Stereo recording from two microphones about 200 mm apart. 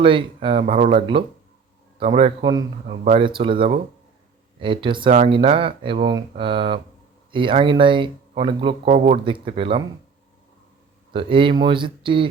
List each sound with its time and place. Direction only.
0.0 s speech: 25° right (ahead or behind)
2.8 s speech: 35° right (ahead or behind)
11.1 s speech: 25° right (ahead or behind)